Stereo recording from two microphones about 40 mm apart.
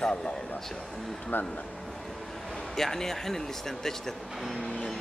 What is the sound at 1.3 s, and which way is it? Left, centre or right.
Speech, left.